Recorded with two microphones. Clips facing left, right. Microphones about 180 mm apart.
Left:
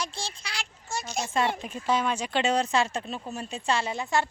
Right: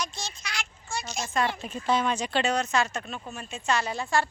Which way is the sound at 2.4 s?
30° left (ahead or behind).